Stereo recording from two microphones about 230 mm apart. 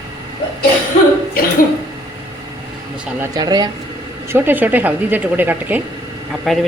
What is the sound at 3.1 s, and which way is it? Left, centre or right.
A woman's voice, centre.